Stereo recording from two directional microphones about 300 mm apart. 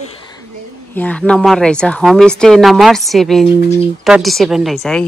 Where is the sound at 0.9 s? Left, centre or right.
Centre.